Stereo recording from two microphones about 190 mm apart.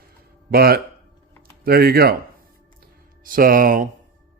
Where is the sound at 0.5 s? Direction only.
55° right (ahead or behind).